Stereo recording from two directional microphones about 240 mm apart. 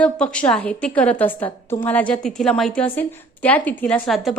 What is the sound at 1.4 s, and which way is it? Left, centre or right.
Speech, left.